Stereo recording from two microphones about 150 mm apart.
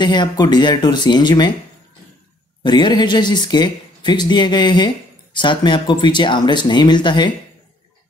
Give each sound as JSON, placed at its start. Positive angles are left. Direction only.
{"t": 0.0, "sound": "speech", "side_deg": 30}
{"t": 2.6, "sound": "speech", "side_deg": 30}